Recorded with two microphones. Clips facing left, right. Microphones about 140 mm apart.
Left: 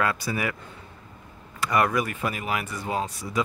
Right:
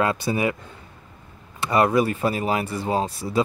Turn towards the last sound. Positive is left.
turn(degrees=-30)  # may be behind; listen again after turning